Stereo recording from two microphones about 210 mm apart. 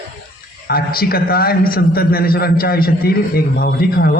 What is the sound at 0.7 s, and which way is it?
A man's voice, 45° left (ahead or behind).